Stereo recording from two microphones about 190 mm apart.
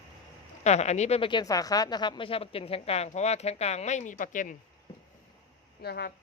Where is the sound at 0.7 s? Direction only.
35° left (ahead or behind).